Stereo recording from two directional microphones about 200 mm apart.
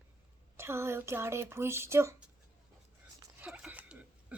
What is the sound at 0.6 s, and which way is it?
Speech, 15° right (ahead or behind).